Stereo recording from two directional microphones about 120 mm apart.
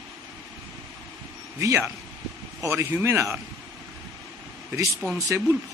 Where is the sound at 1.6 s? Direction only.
25° right (ahead or behind).